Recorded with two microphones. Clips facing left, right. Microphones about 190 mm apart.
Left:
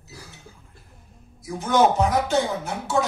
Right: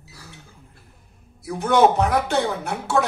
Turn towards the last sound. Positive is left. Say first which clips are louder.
# right 2 dB
turn(degrees=-65)  # may be behind; listen again after turning